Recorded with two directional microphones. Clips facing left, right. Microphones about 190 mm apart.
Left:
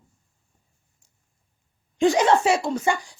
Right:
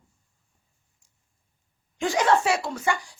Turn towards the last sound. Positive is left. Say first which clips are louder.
# left 4 dB
turn(degrees=20)  # may be behind; listen again after turning